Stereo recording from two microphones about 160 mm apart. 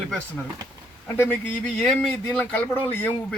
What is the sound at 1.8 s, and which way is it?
A man's voice, 5° left (ahead or behind).